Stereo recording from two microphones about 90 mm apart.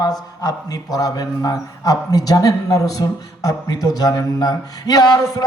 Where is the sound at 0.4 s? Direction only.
45° left (ahead or behind).